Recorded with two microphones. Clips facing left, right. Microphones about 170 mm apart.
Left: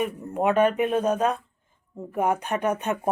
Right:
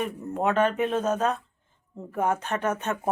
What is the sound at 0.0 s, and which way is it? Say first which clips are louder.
Speech: left 2 dB; 10° left (ahead or behind).